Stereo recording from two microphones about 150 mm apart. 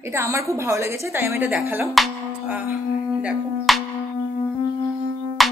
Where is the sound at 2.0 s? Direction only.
10° right (ahead or behind).